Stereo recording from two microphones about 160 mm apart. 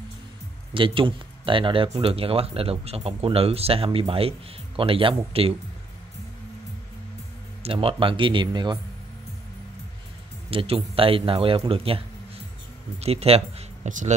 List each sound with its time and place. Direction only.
0.7 s speech: 30° right (ahead or behind)
7.6 s speech: 35° right (ahead or behind)
10.5 s speech: 35° right (ahead or behind)
13.0 s speech: 40° right (ahead or behind)